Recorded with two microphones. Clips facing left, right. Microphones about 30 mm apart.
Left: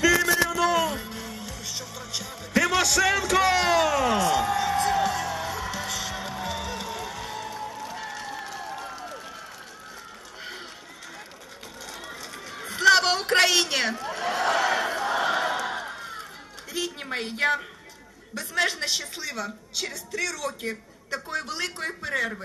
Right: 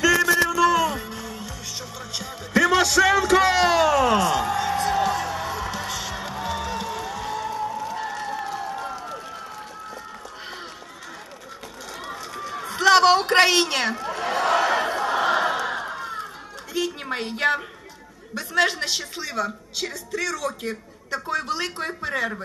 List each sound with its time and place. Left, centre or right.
0.1 s a sound: centre
0.5 s music: centre
2.0 s music: centre
7.9 s crowd: centre
12.1 s run: centre
12.9 s a sound: centre
17.2 s a man's voice: right
18.6 s a woman's voice: centre
21.4 s a man's voice: right